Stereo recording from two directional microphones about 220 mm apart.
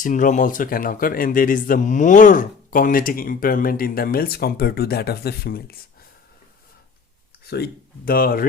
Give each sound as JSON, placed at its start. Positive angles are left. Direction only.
{"t": 0.0, "sound": "speech", "side_deg": 35}
{"t": 7.5, "sound": "speech", "side_deg": 45}